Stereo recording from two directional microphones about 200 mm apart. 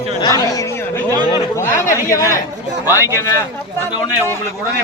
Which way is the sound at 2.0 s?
15° left (ahead or behind).